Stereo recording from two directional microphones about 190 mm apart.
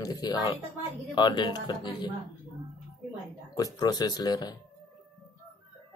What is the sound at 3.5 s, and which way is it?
Speech, 20° left (ahead or behind).